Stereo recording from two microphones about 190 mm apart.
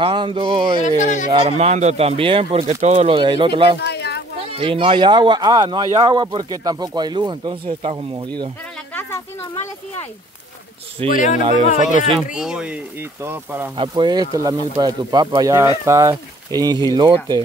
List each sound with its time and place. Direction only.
0.0 s speech: 25° right (ahead or behind)
0.8 s speech: 40° left (ahead or behind)
1.3 s speech: 35° right (ahead or behind)
3.8 s a sound: 60° left (ahead or behind)
4.5 s speech: 30° right (ahead or behind)
8.9 s a sound: 10° left (ahead or behind)
11.1 s speech: 40° left (ahead or behind)
12.4 s speech: 5° right (ahead or behind)
13.7 s speech: 25° right (ahead or behind)